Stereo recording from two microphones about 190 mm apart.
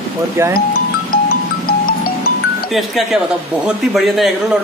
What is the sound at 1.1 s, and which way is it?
Music, 50° left (ahead or behind).